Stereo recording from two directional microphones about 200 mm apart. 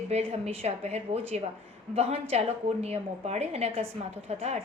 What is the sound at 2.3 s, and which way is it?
A woman's voice, 30° right (ahead or behind).